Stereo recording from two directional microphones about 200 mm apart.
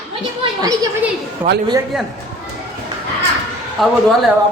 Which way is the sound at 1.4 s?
10° right (ahead or behind).